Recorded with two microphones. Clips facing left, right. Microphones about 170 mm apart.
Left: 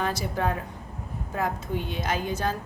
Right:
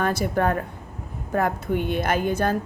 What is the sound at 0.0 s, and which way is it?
A woman's voice, 55° right (ahead or behind).